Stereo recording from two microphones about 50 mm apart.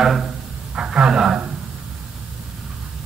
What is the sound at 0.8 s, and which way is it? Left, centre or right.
Speech, centre.